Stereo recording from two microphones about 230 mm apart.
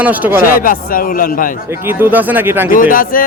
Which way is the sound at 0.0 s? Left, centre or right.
Centre.